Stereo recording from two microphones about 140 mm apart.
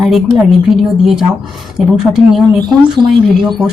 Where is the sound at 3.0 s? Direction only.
35° right (ahead or behind).